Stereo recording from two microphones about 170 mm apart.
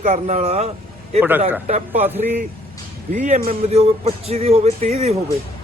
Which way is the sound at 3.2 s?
45° right (ahead or behind).